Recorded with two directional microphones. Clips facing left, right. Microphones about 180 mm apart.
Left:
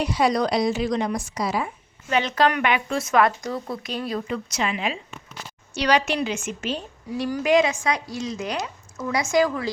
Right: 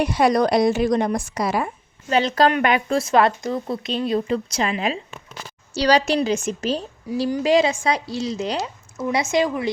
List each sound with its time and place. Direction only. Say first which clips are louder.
0.0 s a woman's voice: right 4 dB; 50° right (ahead or behind)
2.0 s speech: right 3 dB; 35° right (ahead or behind)
7.1 s a woman's voice: right 2 dB; 20° right (ahead or behind)